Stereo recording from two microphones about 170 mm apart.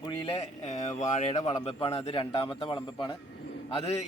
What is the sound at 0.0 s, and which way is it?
Speech, 30° left (ahead or behind).